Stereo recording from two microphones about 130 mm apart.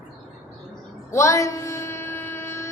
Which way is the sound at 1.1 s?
25° left (ahead or behind).